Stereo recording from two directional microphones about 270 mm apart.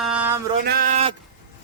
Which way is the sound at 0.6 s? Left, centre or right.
Right.